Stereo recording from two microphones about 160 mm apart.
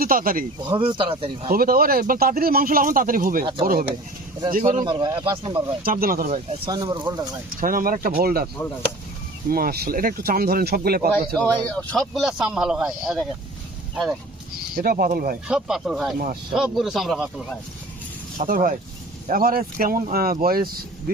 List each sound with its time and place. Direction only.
0.0 s speech: 65° right (ahead or behind)
0.6 s speech: 30° right (ahead or behind)
1.5 s speech: 65° right (ahead or behind)
4.9 s speech: 30° right (ahead or behind)
5.8 s speech: 60° right (ahead or behind)
6.7 s speech: 25° right (ahead or behind)
7.6 s speech: 60° right (ahead or behind)
9.5 s speech: 65° right (ahead or behind)
11.3 s speech: 10° left (ahead or behind)
14.8 s speech: 65° right (ahead or behind)
15.4 s speech: 5° right (ahead or behind)
16.1 s speech: 65° right (ahead or behind)
16.5 s speech: 5° right (ahead or behind)
18.3 s speech: 60° right (ahead or behind)